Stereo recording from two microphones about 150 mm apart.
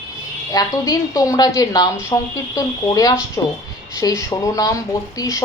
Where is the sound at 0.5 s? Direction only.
25° left (ahead or behind).